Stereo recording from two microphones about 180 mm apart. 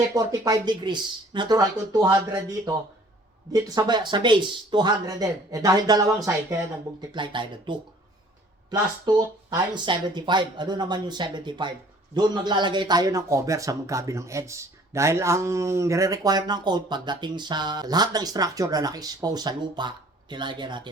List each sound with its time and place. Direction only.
0.1 s a man's voice: 20° right (ahead or behind)